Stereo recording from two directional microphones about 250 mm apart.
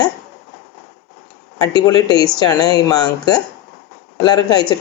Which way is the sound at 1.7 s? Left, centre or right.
Centre.